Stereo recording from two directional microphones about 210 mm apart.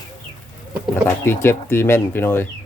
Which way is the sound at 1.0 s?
10° left (ahead or behind).